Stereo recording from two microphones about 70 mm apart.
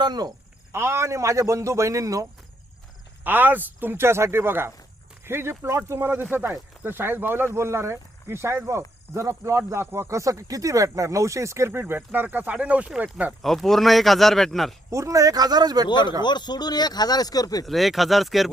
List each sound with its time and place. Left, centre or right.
0.0 s speech: right
0.7 s speech: right
3.2 s speech: right
13.4 s speech: centre
14.8 s speech: right
15.9 s speech: left
17.7 s speech: centre